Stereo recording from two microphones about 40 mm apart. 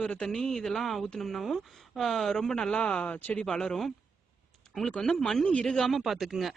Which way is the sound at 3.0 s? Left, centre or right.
Left.